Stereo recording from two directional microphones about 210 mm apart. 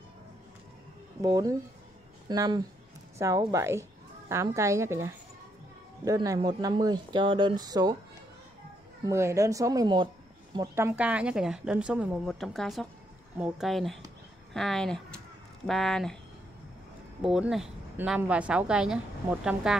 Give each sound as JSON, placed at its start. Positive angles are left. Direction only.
{"t": 1.2, "sound": "speech", "side_deg": -20}
{"t": 9.0, "sound": "speech", "side_deg": -15}
{"t": 17.2, "sound": "speech", "side_deg": 0}